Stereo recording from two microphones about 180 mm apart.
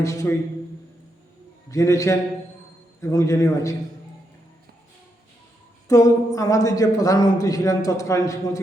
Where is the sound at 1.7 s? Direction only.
15° left (ahead or behind).